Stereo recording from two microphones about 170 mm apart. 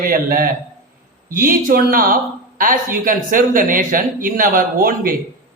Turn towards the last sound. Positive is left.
turn(degrees=-55)  # may be behind; listen again after turning